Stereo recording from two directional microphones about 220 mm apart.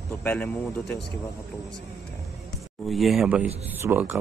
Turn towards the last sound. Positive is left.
turn(degrees=-10)  # may be behind; listen again after turning